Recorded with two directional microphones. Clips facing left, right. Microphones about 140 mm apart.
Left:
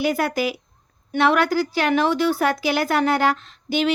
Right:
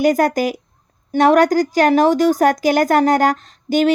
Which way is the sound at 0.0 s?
45° right (ahead or behind).